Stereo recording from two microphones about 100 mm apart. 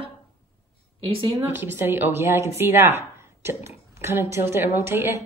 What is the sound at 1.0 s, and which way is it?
Speech, 65° right (ahead or behind).